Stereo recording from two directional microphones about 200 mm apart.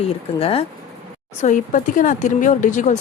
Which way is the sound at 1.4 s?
40° left (ahead or behind).